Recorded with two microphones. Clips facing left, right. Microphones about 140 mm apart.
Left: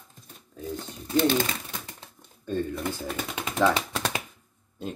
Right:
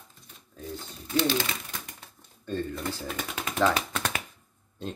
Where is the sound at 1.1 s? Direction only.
50° left (ahead or behind).